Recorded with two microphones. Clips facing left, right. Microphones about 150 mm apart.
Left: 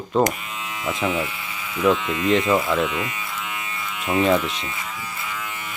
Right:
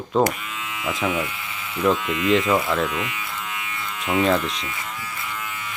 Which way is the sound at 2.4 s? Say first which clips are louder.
Left 1 dB; 25° left (ahead or behind).